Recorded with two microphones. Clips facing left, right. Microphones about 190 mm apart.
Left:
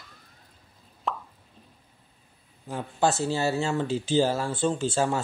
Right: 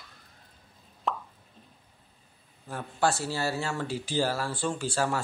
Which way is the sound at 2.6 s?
20° left (ahead or behind).